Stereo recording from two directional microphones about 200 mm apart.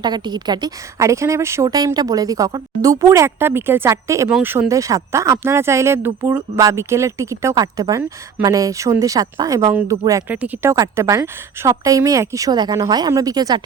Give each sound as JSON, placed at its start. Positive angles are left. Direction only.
{"t": 0.0, "sound": "speech", "side_deg": -20}